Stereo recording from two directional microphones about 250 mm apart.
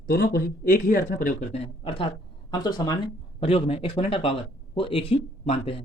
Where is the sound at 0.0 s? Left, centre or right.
Left.